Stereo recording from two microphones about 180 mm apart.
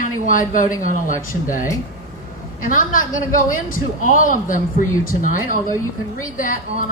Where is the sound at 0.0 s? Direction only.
45° left (ahead or behind).